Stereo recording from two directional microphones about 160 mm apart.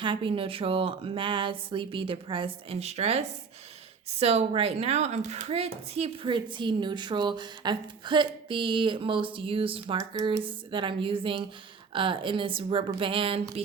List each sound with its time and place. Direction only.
0.0 s a woman's voice: 30° right (ahead or behind)